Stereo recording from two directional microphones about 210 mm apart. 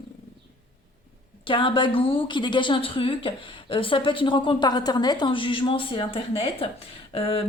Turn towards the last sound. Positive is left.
turn(degrees=25)  # may be behind; listen again after turning